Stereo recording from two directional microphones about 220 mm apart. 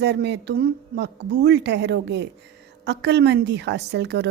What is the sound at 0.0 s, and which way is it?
A woman's voice, 50° right (ahead or behind).